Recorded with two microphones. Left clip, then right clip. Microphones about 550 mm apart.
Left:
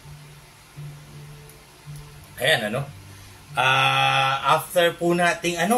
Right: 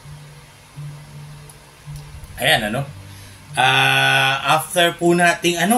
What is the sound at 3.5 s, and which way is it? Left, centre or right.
Speech, left.